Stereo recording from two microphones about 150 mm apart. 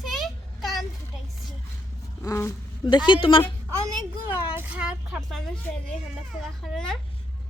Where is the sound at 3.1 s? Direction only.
35° left (ahead or behind).